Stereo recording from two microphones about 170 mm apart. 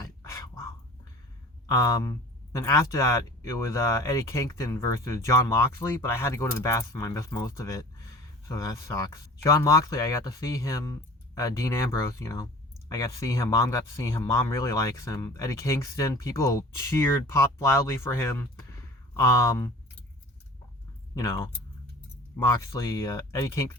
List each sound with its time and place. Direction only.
0.0 s a sound: 15° left (ahead or behind)
1.6 s speech: 20° left (ahead or behind)
21.2 s speech: 20° left (ahead or behind)
22.5 s speech: 20° left (ahead or behind)